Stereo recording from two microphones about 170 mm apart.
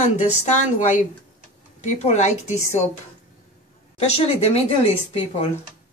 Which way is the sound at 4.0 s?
35° left (ahead or behind).